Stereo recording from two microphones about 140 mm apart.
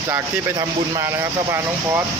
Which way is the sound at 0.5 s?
25° right (ahead or behind).